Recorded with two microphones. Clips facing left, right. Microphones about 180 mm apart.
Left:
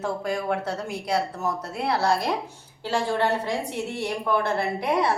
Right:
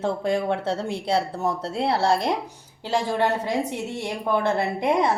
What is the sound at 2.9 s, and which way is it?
A woman's voice, 15° right (ahead or behind).